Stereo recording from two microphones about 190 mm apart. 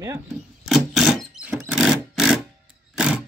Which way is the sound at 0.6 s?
Centre (ahead or behind).